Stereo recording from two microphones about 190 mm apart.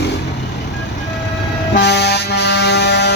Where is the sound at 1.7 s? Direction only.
60° left (ahead or behind).